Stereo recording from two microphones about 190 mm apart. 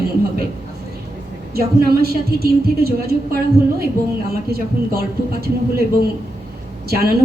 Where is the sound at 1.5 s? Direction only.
55° right (ahead or behind).